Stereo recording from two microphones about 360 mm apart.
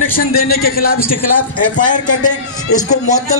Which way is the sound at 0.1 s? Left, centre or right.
Left.